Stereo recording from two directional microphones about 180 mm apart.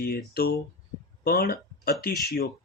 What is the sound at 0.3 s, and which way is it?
Speech, 55° left (ahead or behind).